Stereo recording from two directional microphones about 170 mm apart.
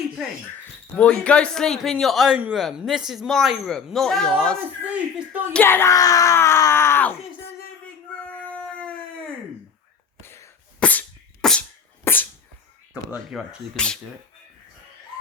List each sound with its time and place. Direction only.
0.9 s a man's voice: 5° left (ahead or behind)
4.9 s speech: 10° right (ahead or behind)
5.5 s speech: 15° left (ahead or behind)
8.3 s howl: 5° left (ahead or behind)
10.2 s cough: 15° left (ahead or behind)
10.8 s sneeze: 10° left (ahead or behind)
12.9 s a man's voice: 5° right (ahead or behind)